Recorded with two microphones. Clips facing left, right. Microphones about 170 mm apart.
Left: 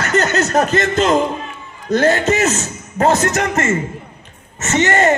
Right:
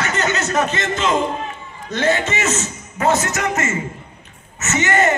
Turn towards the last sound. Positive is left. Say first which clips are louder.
# left 3 dB
turn(degrees=35)  # may be behind; listen again after turning